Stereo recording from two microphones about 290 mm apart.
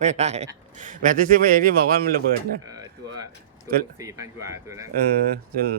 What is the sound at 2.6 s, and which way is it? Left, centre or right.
Speech, centre.